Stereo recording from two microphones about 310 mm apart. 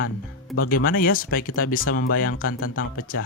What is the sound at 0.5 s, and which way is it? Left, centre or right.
Speech, left.